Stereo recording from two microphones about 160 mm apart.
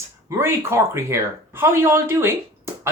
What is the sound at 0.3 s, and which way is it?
Speech, 15° right (ahead or behind).